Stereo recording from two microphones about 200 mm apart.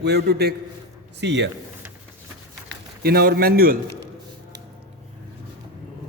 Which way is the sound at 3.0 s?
50° right (ahead or behind).